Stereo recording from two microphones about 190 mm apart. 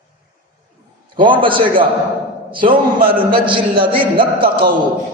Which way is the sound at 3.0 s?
50° right (ahead or behind).